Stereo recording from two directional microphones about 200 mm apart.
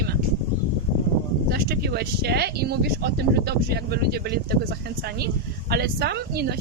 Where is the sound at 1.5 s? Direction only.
50° right (ahead or behind).